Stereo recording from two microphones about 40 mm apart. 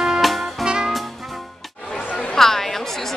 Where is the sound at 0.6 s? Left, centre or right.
Right.